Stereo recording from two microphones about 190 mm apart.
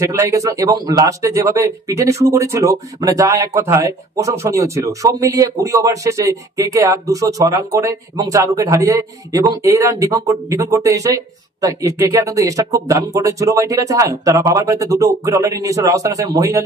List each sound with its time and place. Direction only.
0.0 s speech: 15° right (ahead or behind)